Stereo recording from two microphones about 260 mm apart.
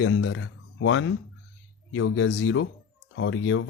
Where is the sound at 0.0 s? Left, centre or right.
Left.